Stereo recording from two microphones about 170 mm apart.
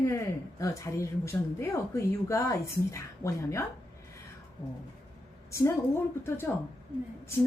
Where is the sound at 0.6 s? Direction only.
20° left (ahead or behind).